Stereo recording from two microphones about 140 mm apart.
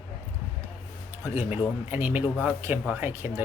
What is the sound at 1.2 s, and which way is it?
Speech, 15° right (ahead or behind).